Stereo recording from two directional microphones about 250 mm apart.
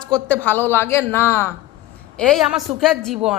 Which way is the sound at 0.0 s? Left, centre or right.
Centre.